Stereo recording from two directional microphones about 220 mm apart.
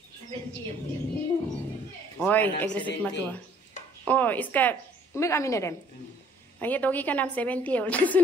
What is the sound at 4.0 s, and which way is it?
A woman's voice, 5° left (ahead or behind).